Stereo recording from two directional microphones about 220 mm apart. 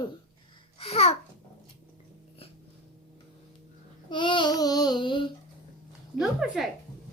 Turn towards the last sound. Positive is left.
turn(degrees=0)  # may be behind; listen again after turning